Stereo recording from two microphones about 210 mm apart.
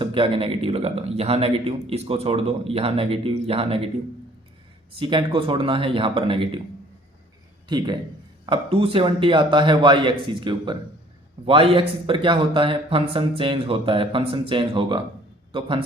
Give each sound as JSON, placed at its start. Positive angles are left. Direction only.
{"t": 0.0, "sound": "a man's voice", "side_deg": -25}
{"t": 4.9, "sound": "a man's voice", "side_deg": -25}
{"t": 7.7, "sound": "a man's voice", "side_deg": -20}